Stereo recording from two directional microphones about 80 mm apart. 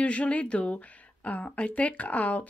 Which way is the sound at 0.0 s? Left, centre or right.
Centre.